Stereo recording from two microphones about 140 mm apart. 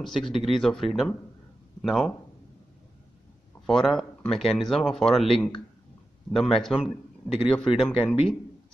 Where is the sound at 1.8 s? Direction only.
5° left (ahead or behind).